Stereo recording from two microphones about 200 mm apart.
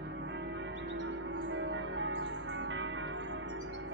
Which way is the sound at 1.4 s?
70° right (ahead or behind).